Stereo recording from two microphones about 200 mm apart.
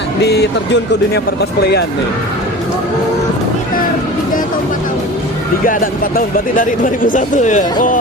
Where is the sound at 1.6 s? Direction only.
55° left (ahead or behind).